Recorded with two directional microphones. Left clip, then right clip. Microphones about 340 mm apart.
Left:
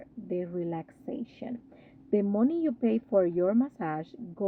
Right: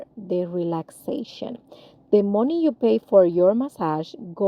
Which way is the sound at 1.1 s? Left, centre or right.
Right.